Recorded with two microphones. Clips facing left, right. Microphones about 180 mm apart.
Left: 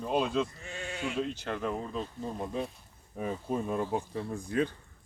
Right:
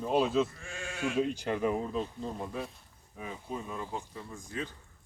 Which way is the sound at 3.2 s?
50° left (ahead or behind).